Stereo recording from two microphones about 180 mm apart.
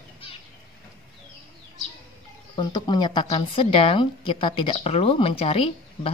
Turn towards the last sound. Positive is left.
turn(degrees=30)  # may be behind; listen again after turning